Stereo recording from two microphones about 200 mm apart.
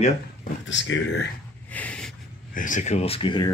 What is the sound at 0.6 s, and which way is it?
Speech, 70° left (ahead or behind).